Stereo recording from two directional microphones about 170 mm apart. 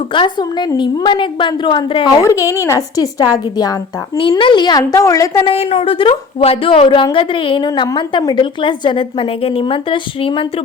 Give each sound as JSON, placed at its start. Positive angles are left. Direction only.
{"t": 0.1, "sound": "a woman's voice", "side_deg": 30}
{"t": 2.2, "sound": "a woman's voice", "side_deg": 20}
{"t": 5.5, "sound": "a woman's voice", "side_deg": 35}